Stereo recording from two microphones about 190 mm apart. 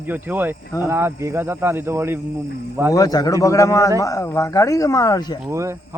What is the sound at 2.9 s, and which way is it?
Speech, 20° left (ahead or behind).